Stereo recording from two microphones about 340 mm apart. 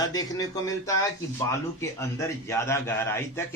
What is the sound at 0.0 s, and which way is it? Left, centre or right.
A man's voice, centre.